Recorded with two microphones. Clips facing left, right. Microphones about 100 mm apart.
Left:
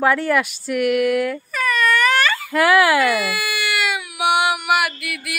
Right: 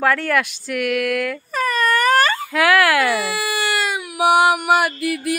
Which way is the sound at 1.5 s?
35° right (ahead or behind).